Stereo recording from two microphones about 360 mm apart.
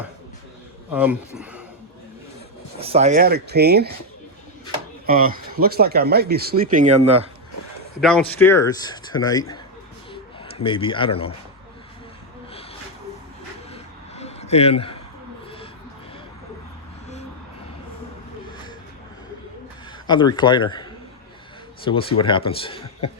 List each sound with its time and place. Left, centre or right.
0.9 s speech: centre
2.8 s speech: centre
5.0 s speech: right
8.0 s a man's voice: centre
14.2 s a sound: centre
20.1 s a man's voice: centre
21.8 s a man's voice: centre